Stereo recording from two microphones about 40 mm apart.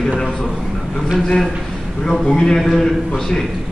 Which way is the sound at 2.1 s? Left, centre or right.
Centre.